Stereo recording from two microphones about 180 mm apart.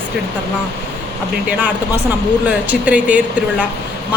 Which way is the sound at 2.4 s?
10° right (ahead or behind).